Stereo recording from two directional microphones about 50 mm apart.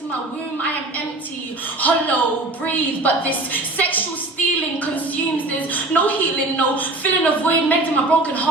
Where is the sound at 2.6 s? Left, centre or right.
Left.